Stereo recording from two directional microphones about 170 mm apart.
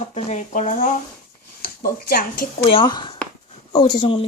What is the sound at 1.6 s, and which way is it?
Speech, 60° left (ahead or behind).